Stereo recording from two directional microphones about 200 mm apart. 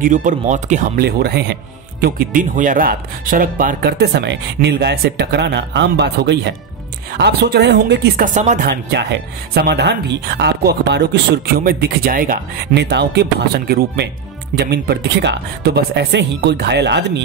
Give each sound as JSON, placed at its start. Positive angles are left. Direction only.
{"t": 0.0, "sound": "speech", "side_deg": -40}
{"t": 1.0, "sound": "speech", "side_deg": -55}
{"t": 8.4, "sound": "speech", "side_deg": -40}
{"t": 8.6, "sound": "speech", "side_deg": -55}